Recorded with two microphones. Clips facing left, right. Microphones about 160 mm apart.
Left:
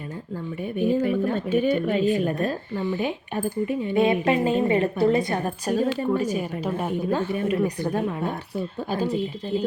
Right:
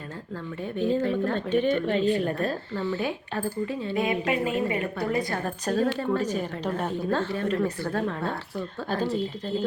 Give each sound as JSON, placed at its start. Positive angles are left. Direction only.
{"t": 0.6, "sound": "speech", "side_deg": 10}
{"t": 3.9, "sound": "a woman's voice", "side_deg": 30}
{"t": 5.4, "sound": "speech", "side_deg": 15}